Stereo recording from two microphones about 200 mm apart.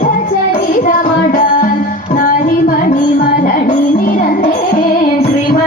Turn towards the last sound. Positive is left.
turn(degrees=45)  # may be behind; listen again after turning